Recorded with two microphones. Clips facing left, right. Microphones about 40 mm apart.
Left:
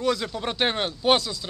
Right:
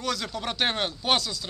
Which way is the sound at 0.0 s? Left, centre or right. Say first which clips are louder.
Left 5 dB; centre.